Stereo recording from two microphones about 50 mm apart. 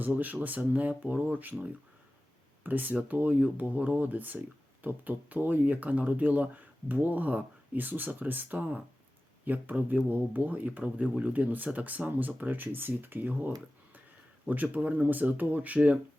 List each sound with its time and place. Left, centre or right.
0.0 s speech: right